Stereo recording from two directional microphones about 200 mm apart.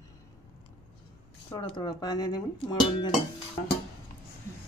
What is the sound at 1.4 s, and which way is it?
Speech, 25° left (ahead or behind).